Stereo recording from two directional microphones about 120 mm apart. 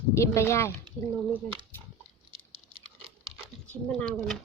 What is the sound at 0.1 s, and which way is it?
Speech, 25° left (ahead or behind).